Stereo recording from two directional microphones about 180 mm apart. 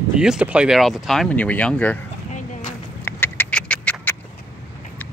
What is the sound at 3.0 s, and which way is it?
Rodents, 10° left (ahead or behind).